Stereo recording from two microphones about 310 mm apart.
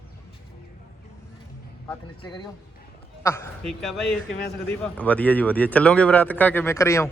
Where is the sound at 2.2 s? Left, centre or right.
Centre.